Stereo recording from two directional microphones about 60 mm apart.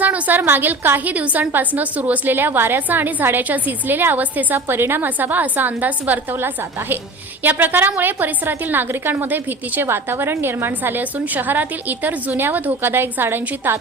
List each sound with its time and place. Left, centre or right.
0.0 s a woman's voice: right
4.5 s a woman's voice: right